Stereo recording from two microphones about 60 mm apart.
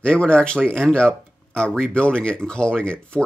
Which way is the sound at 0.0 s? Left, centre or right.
Centre.